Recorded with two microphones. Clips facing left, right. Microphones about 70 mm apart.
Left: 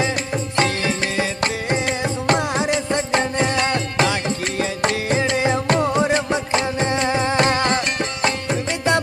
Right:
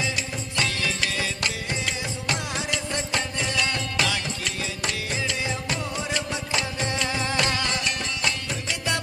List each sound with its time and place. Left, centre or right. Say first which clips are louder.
0.6 s music: left 6 dB; left